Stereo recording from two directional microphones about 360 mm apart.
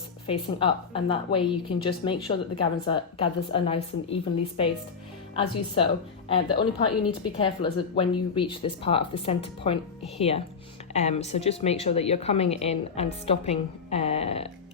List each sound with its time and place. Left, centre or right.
0.3 s a woman's voice: centre
5.4 s a woman's voice: centre